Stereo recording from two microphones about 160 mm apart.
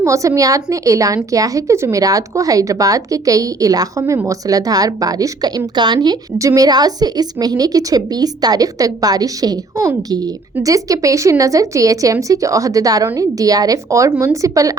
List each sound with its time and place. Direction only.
0.0 s speech: 20° right (ahead or behind)